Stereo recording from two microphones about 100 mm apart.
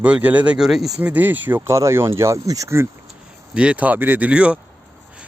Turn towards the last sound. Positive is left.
turn(degrees=-10)  # may be behind; listen again after turning